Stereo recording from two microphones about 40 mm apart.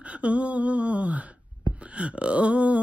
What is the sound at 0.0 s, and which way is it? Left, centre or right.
Speech, right.